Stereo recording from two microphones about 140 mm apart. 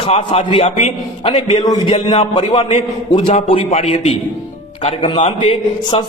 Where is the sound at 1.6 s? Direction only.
25° left (ahead or behind).